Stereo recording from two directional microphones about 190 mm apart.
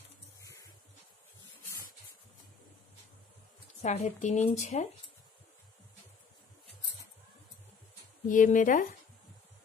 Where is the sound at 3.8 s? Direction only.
35° left (ahead or behind).